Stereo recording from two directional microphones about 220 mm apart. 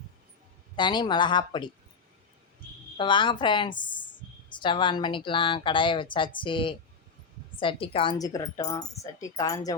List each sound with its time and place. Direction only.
0.8 s a woman's voice: 20° left (ahead or behind)
3.0 s a woman's voice: 20° left (ahead or behind)